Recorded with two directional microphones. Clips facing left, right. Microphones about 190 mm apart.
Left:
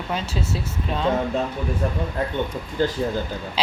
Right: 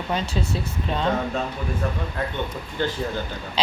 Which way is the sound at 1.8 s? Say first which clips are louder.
Left 1 dB; 35° left (ahead or behind).